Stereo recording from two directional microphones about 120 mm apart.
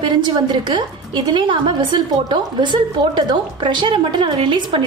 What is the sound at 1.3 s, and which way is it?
A woman's voice, 40° right (ahead or behind).